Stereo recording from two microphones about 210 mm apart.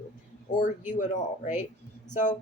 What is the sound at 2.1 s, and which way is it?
Speech, 35° left (ahead or behind).